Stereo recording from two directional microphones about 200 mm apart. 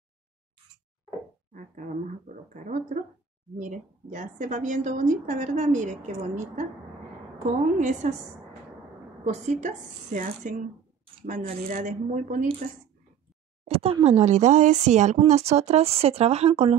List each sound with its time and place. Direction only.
1.5 s speech: 40° right (ahead or behind)
8.0 s speech: 35° right (ahead or behind)
9.2 s speech: 35° right (ahead or behind)
13.7 s speech: 30° right (ahead or behind)